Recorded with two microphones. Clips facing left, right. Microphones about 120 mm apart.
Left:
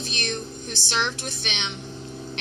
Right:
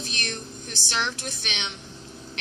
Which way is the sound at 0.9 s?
35° left (ahead or behind).